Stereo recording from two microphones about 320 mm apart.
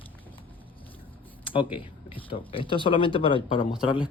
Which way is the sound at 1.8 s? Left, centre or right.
Centre.